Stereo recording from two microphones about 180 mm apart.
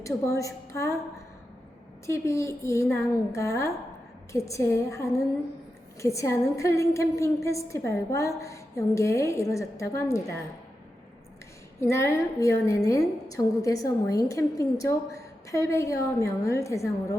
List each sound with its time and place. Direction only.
0.0 s a woman's voice: 15° left (ahead or behind)
2.0 s a woman's voice: 15° left (ahead or behind)
11.8 s a woman's voice: 15° left (ahead or behind)